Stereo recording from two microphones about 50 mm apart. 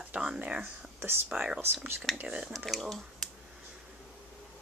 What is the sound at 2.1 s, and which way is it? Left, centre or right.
Speech, centre.